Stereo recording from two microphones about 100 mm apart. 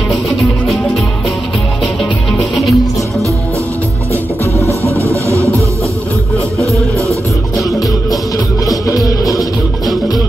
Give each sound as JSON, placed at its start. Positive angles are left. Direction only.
{"t": 2.3, "sound": "music", "side_deg": 0}
{"t": 4.6, "sound": "music", "side_deg": -30}
{"t": 6.6, "sound": "music", "side_deg": -30}
{"t": 8.8, "sound": "music", "side_deg": 35}
{"t": 9.2, "sound": "music", "side_deg": 0}